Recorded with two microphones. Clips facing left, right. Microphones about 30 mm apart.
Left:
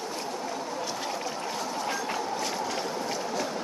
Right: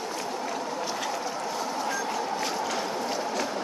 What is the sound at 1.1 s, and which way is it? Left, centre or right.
Train, centre.